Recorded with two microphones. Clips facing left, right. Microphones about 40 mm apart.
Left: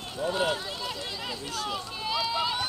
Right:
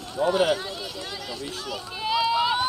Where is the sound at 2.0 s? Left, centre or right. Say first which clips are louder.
Right 7 dB; centre.